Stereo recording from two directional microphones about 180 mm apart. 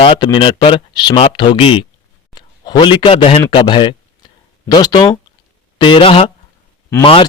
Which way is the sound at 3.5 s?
25° left (ahead or behind).